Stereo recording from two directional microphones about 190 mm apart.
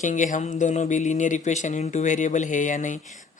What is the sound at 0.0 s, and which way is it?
Speech, 40° left (ahead or behind).